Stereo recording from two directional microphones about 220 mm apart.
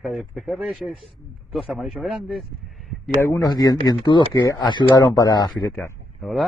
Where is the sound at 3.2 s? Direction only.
15° left (ahead or behind).